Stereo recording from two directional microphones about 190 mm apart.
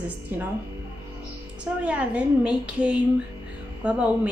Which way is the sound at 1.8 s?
5° right (ahead or behind).